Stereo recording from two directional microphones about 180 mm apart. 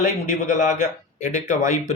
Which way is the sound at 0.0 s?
45° left (ahead or behind).